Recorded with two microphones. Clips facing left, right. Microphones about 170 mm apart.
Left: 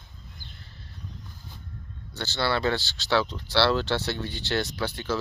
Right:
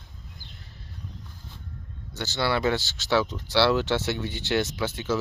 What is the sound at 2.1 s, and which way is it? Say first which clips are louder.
Speech: right 1 dB; 15° right (ahead or behind).